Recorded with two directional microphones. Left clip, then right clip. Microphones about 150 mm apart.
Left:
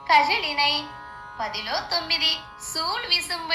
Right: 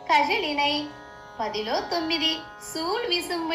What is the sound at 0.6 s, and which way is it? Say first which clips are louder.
Speech: left 3 dB; 50° left (ahead or behind).